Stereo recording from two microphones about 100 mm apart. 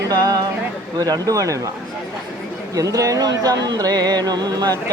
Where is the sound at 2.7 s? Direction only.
35° right (ahead or behind).